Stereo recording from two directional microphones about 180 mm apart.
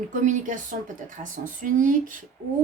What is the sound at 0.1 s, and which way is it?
A woman's voice, 45° right (ahead or behind).